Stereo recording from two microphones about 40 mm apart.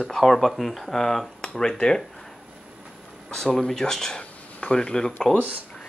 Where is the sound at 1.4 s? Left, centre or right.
Centre.